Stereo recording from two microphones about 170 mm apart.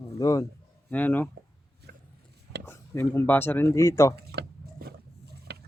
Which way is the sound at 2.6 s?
15° left (ahead or behind).